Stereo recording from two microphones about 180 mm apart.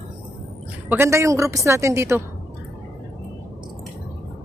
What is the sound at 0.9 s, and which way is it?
A woman's voice, 15° right (ahead or behind).